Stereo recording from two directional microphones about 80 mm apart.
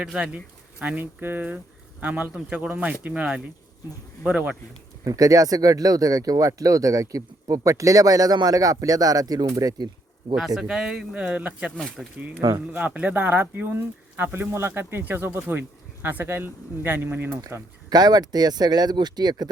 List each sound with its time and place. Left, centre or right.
0.0 s speech: centre
5.0 s speech: right
10.3 s speech: centre
12.0 s speech: centre
12.4 s speech: right
12.7 s speech: centre
17.8 s speech: right